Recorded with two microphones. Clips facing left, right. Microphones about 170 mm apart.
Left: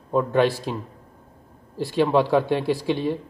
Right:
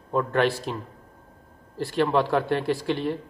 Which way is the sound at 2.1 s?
15° left (ahead or behind).